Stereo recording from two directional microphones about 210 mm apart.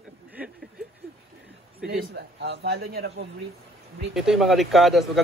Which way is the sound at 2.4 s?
50° right (ahead or behind).